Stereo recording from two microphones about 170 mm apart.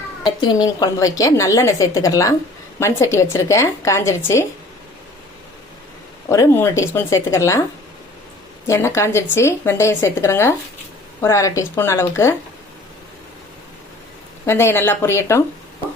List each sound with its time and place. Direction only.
0.3 s a woman's voice: 25° left (ahead or behind)
6.2 s speech: 15° left (ahead or behind)
8.6 s speech: 15° left (ahead or behind)
14.4 s speech: 15° left (ahead or behind)